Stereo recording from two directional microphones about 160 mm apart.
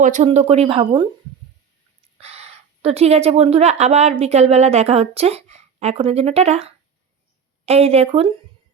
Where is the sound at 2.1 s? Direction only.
40° right (ahead or behind).